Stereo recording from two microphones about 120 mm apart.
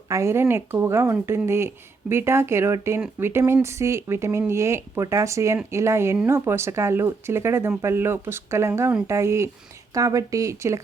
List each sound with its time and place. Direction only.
0.1 s speech: 25° right (ahead or behind)